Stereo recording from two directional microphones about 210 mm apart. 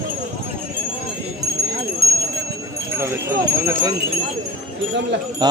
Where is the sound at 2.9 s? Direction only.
10° right (ahead or behind).